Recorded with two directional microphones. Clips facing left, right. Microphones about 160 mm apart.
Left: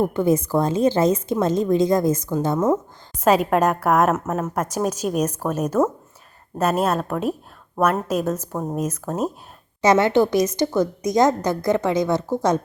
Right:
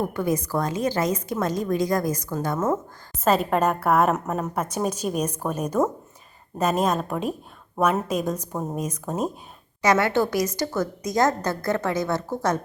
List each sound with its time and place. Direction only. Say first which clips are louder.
0.0 s a woman's voice: left 6 dB; 25° left (ahead or behind)
3.2 s a woman's voice: left 4 dB; 10° left (ahead or behind)
9.8 s a woman's voice: left 4 dB; 25° left (ahead or behind)